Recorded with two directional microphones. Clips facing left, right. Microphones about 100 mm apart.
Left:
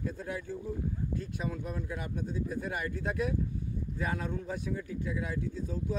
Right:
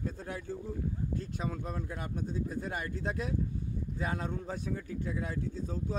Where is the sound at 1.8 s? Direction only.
40° right (ahead or behind).